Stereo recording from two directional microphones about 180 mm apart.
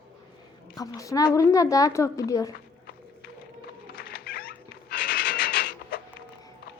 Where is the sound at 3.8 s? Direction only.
60° left (ahead or behind).